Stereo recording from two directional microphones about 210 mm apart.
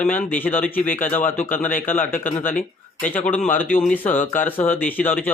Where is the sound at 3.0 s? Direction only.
10° left (ahead or behind).